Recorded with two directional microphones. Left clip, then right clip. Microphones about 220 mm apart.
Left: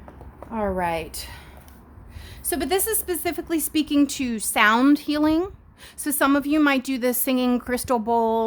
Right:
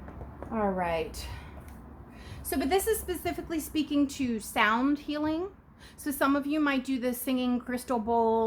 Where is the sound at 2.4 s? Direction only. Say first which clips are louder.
Left 3 dB; 40° left (ahead or behind).